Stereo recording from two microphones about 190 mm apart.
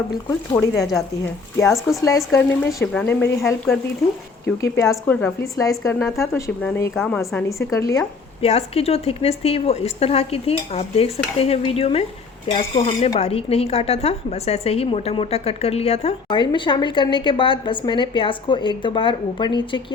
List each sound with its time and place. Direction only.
0.8 s a woman's voice: centre (ahead or behind)
2.0 s speech: 15° left (ahead or behind)
4.6 s a woman's voice: 15° left (ahead or behind)
7.7 s speech: 15° left (ahead or behind)
8.4 s a woman's voice: 30° left (ahead or behind)